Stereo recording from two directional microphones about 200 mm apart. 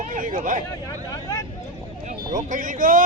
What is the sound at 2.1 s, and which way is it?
Speech, 40° right (ahead or behind).